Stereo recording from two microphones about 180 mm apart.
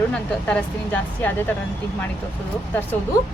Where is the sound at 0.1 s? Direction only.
5° left (ahead or behind).